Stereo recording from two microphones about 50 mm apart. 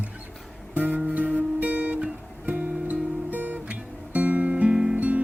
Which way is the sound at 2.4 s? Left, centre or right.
Right.